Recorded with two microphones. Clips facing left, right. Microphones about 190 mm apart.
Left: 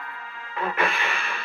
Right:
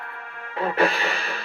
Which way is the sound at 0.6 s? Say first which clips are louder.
Right 5 dB; 35° right (ahead or behind).